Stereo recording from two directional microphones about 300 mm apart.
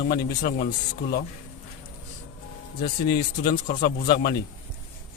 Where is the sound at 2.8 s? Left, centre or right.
Left.